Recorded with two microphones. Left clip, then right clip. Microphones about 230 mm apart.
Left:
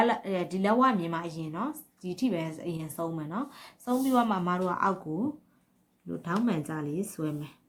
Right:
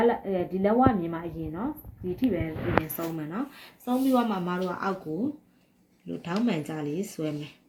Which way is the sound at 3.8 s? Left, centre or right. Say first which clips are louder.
Right 1 dB; centre.